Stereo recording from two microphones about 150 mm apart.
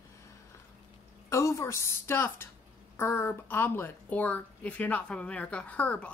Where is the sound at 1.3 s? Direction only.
20° left (ahead or behind).